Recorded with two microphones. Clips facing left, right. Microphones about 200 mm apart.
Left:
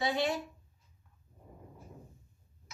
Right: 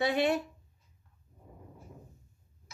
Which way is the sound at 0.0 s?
60° right (ahead or behind).